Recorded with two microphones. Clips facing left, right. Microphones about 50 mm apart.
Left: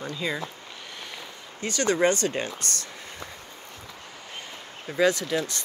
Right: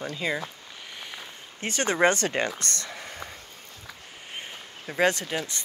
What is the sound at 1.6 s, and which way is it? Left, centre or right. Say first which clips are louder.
Speech: left 2 dB; right.